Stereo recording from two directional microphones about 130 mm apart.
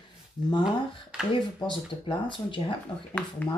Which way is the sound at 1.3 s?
40° left (ahead or behind).